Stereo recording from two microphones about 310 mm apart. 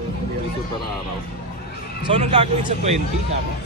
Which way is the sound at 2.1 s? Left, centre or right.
Centre.